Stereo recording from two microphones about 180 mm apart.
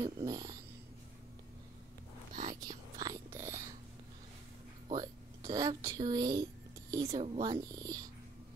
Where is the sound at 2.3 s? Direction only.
50° right (ahead or behind).